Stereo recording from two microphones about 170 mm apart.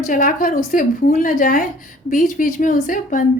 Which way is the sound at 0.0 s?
50° left (ahead or behind).